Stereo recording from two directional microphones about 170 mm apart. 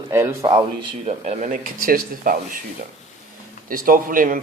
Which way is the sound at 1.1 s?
45° right (ahead or behind).